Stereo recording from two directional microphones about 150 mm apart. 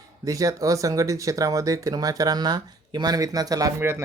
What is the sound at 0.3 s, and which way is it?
Speech, 20° right (ahead or behind).